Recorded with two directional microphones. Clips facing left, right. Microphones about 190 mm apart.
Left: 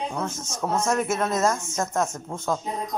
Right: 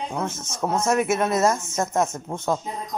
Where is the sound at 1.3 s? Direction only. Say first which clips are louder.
Right 2 dB; 20° right (ahead or behind).